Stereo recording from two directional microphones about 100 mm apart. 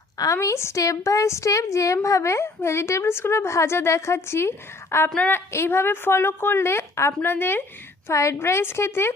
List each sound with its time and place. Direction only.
0.2 s a woman's voice: 30° left (ahead or behind)
5.1 s a woman's voice: 15° left (ahead or behind)
5.5 s a woman's voice: 25° left (ahead or behind)